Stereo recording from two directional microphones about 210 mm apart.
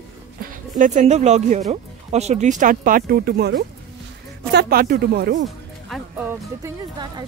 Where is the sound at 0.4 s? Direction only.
40° right (ahead or behind).